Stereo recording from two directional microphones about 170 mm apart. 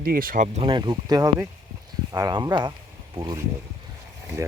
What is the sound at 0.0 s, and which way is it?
Speech, 60° right (ahead or behind).